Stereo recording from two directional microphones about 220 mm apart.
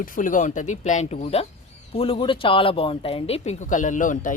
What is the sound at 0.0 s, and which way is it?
Speech, 35° left (ahead or behind).